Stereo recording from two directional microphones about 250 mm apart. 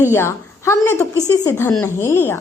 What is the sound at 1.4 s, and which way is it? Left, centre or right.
Speech, centre.